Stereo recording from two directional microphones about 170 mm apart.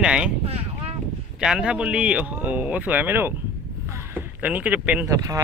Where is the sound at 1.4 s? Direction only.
5° right (ahead or behind).